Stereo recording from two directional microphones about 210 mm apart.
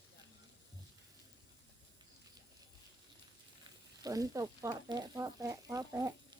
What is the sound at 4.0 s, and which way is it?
Speech, 15° right (ahead or behind).